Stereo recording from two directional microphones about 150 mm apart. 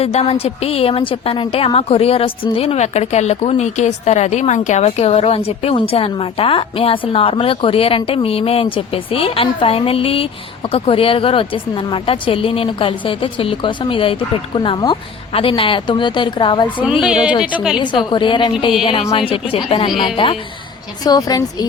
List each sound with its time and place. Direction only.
0.0 s a woman's voice: 45° left (ahead or behind)
17.0 s speech: 5° right (ahead or behind)
17.7 s a woman's voice: 35° left (ahead or behind)
21.0 s a woman's voice: 25° left (ahead or behind)